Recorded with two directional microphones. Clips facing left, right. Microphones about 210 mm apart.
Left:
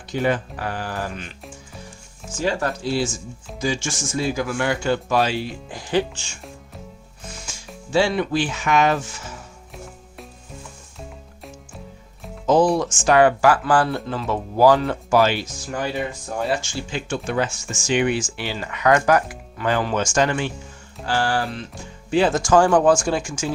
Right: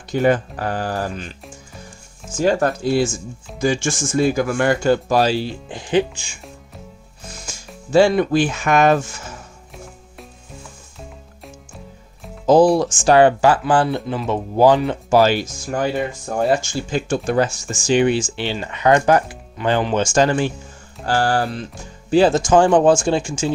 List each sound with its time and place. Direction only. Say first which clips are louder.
0.1 s speech: right 5 dB; 45° right (ahead or behind)
2.4 s speech: right 6 dB; 45° right (ahead or behind); by 6.4 s 10° right (ahead or behind)
7.9 s speech: right 6 dB; 45° right (ahead or behind)
9.7 s music: even; centre (ahead or behind)
12.7 s speech: right 3 dB; 35° right (ahead or behind)
15.1 s speech: right 4 dB; 40° right (ahead or behind)
22.4 s speech: right 2 dB; 20° right (ahead or behind)